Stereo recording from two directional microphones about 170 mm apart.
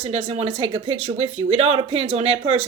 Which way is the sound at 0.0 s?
35° right (ahead or behind).